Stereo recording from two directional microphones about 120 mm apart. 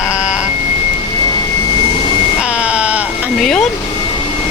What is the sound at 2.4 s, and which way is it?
Sheep, 10° right (ahead or behind).